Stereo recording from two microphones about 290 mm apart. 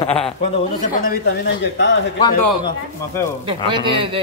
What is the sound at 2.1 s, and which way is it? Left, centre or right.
Speech, centre.